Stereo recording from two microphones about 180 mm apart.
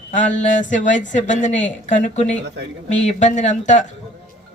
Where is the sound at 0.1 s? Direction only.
45° left (ahead or behind).